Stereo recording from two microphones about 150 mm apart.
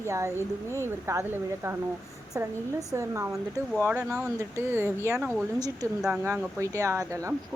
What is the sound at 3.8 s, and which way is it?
Speech, 5° right (ahead or behind).